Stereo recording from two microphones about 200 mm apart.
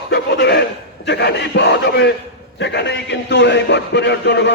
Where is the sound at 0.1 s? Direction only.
55° left (ahead or behind).